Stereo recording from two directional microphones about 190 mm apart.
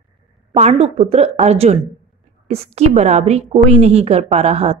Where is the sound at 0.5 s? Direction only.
35° right (ahead or behind).